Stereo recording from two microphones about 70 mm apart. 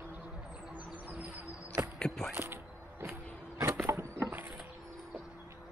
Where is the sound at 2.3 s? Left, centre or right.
Right.